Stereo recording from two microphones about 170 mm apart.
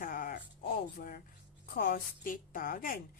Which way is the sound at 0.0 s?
55° left (ahead or behind).